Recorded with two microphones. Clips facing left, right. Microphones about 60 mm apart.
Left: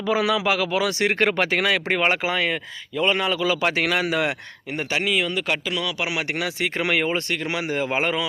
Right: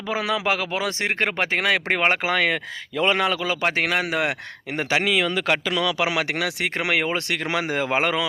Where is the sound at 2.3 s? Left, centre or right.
Right.